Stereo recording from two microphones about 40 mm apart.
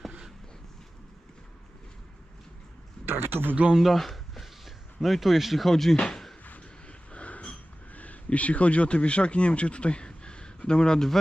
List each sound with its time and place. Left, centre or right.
3.1 s speech: right
3.8 s speech: centre
6.4 s a sound: left
7.9 s speech: left; by 11.1 s centre